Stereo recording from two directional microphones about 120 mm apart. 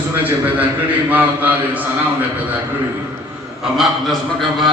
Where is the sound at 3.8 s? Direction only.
Centre (ahead or behind).